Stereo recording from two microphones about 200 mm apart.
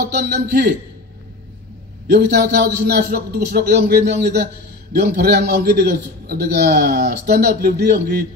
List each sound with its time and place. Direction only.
0.1 s a man's voice: 55° right (ahead or behind)
2.0 s a man's voice: 55° right (ahead or behind)